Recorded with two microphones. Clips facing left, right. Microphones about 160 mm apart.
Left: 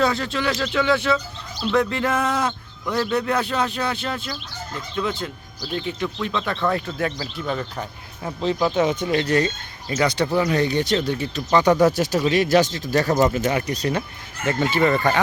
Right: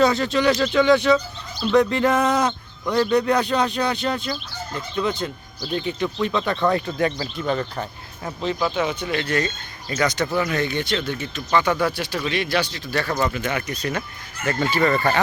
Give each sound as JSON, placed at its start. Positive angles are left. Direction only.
{"t": 0.0, "sound": "speech", "side_deg": 0}
{"t": 8.7, "sound": "speech", "side_deg": 35}
{"t": 13.1, "sound": "speech", "side_deg": 20}
{"t": 13.5, "sound": "speech", "side_deg": 35}
{"t": 14.4, "sound": "speech", "side_deg": 20}